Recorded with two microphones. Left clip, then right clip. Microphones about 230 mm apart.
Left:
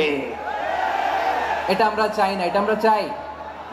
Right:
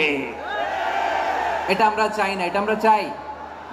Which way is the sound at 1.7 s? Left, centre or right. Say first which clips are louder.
Right 1 dB; right.